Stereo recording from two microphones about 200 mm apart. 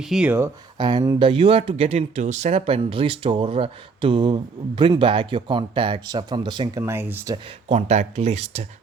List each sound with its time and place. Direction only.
0.0 s speech: 5° right (ahead or behind)
7.7 s speech: 35° right (ahead or behind)